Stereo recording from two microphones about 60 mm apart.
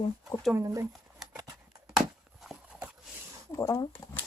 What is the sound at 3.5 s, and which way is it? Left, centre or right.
Speech, left.